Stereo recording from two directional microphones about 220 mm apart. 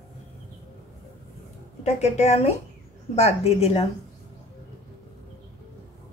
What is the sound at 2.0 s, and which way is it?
Speech, 30° left (ahead or behind).